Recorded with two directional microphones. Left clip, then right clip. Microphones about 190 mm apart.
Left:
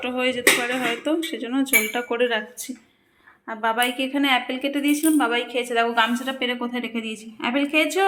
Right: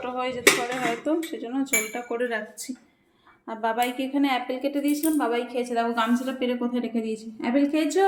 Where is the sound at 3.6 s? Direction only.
5° right (ahead or behind).